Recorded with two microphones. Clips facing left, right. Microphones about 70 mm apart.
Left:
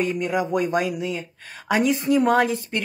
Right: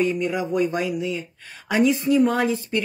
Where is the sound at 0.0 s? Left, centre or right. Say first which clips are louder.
Right 1 dB; left.